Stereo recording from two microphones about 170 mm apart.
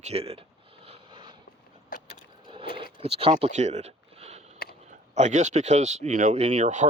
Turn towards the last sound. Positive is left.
turn(degrees=-45)  # may be behind; listen again after turning